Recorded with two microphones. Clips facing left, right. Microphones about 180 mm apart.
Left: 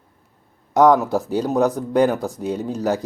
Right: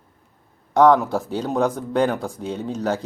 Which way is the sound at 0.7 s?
10° left (ahead or behind).